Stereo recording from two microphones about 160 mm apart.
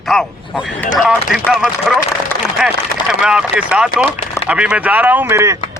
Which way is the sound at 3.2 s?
5° right (ahead or behind).